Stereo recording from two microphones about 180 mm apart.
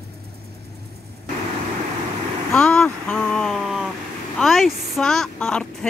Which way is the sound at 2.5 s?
5° left (ahead or behind).